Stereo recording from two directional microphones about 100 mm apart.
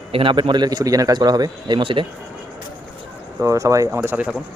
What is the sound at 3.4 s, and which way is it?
Speech, 35° right (ahead or behind).